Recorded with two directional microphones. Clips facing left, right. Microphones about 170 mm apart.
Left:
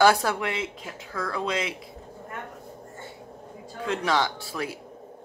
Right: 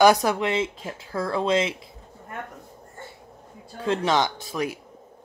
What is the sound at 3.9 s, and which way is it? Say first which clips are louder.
Speech: right 3 dB; 20° right (ahead or behind).